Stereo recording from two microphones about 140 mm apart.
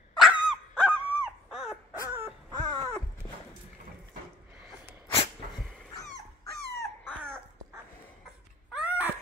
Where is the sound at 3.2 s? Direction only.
30° left (ahead or behind).